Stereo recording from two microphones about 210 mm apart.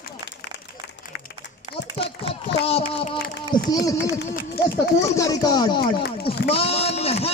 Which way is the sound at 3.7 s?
15° left (ahead or behind).